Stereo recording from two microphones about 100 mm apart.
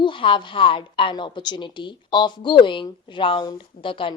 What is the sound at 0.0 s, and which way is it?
A woman's voice, 60° left (ahead or behind).